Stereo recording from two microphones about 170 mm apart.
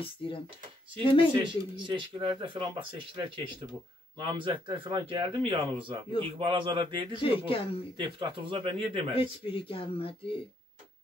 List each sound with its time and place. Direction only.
1.3 s speech: 25° right (ahead or behind)
7.2 s speech: 30° left (ahead or behind)
8.0 s speech: 30° right (ahead or behind)
9.1 s speech: 30° left (ahead or behind)